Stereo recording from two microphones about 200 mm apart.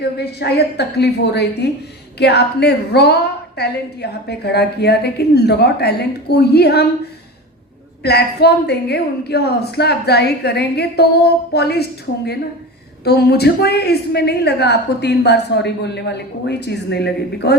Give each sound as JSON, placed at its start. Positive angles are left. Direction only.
{"t": 0.2, "sound": "a woman's voice", "side_deg": 55}
{"t": 8.0, "sound": "a woman's voice", "side_deg": 55}